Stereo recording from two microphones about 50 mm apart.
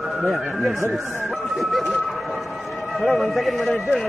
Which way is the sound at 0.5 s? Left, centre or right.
Centre.